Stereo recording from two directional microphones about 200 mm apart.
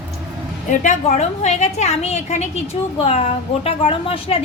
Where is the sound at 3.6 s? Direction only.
30° left (ahead or behind).